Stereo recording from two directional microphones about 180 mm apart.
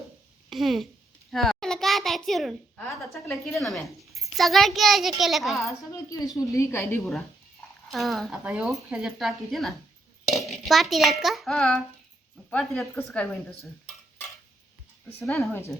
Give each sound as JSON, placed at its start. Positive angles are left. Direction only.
{"t": 0.5, "sound": "a child's voice", "side_deg": 0}
{"t": 5.6, "sound": "a woman's voice", "side_deg": 20}
{"t": 7.9, "sound": "a child's voice", "side_deg": 0}